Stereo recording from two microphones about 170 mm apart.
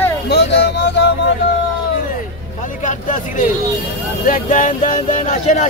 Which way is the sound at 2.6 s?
50° left (ahead or behind).